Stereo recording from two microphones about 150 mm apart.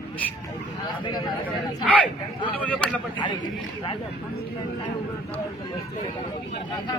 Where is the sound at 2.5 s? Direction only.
10° left (ahead or behind).